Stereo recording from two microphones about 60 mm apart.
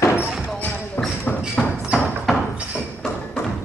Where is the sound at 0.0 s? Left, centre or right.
Left.